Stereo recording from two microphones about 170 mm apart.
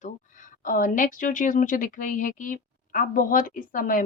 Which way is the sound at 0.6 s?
50° left (ahead or behind).